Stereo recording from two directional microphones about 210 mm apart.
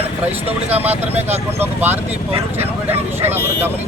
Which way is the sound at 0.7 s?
10° right (ahead or behind).